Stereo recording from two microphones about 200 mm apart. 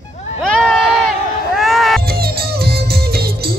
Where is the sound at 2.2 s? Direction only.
50° right (ahead or behind).